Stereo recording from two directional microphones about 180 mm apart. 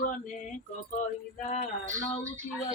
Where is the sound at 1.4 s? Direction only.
45° left (ahead or behind).